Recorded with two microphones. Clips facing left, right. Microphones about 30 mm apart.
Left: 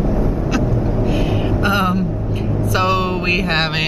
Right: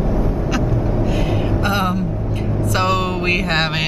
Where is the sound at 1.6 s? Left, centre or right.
Centre.